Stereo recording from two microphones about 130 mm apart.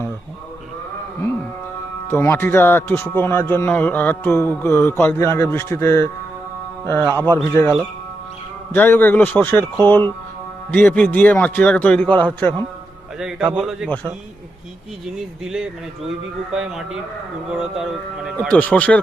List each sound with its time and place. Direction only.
2.0 s speech: 20° left (ahead or behind)
8.7 s speech: 15° left (ahead or behind)
13.1 s speech: 5° right (ahead or behind)
15.0 s speech: 5° right (ahead or behind)
18.3 s speech: 10° left (ahead or behind)